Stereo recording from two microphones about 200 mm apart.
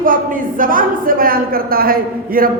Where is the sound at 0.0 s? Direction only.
45° right (ahead or behind).